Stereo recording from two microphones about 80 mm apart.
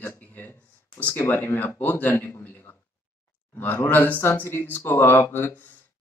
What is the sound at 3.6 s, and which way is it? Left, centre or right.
A man's voice, left.